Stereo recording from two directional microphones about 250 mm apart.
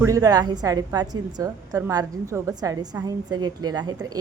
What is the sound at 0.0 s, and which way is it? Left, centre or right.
A woman's voice, centre.